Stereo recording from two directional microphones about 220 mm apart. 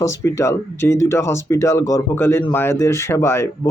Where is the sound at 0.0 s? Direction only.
15° left (ahead or behind).